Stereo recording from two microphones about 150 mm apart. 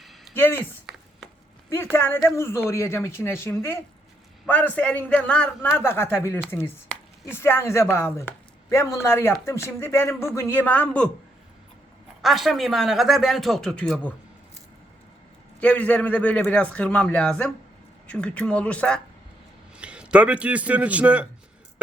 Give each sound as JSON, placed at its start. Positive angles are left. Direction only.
{"t": 0.0, "sound": "a sound", "side_deg": 0}
{"t": 0.3, "sound": "speech", "side_deg": 15}
{"t": 12.2, "sound": "speech", "side_deg": 0}
{"t": 15.6, "sound": "speech", "side_deg": 10}
{"t": 19.7, "sound": "a man's voice", "side_deg": -5}